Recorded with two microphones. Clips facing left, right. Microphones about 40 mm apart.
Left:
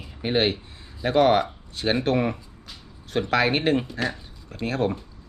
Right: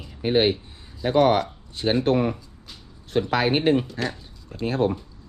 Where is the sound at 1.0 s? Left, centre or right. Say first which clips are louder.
Even; centre.